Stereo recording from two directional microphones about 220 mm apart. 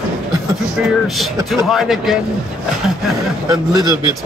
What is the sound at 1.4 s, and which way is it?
Speech, centre (ahead or behind).